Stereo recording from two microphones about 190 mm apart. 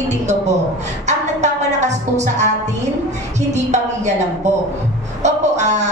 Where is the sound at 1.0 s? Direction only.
40° right (ahead or behind).